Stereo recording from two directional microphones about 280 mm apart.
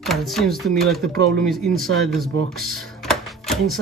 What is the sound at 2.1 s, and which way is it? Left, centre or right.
Music, centre.